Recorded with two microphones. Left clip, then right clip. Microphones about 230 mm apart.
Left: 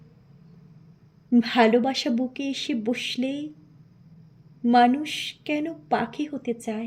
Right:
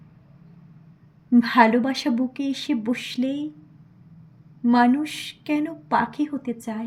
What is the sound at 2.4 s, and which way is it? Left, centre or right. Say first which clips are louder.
A woman's voice: right 2 dB; right.